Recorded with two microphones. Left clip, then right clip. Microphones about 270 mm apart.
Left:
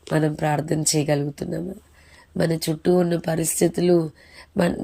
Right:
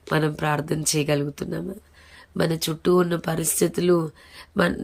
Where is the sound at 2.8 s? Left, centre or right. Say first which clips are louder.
Even; right.